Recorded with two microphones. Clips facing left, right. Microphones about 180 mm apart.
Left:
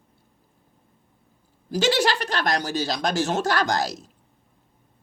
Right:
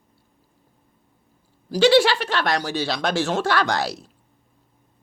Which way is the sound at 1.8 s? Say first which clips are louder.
Right 6 dB; 40° left (ahead or behind).